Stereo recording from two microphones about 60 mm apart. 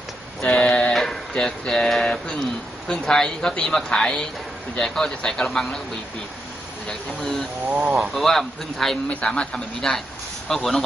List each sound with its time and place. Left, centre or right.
0.5 s a sound: centre
1.3 s speech: centre
6.9 s speech: centre
9.1 s speech: centre